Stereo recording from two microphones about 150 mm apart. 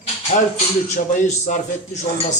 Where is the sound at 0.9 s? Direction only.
50° left (ahead or behind).